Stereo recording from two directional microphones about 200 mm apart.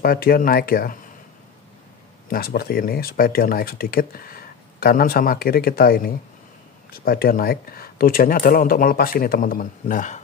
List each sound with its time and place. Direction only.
0.0 s speech: 45° left (ahead or behind)
2.2 s speech: 50° left (ahead or behind)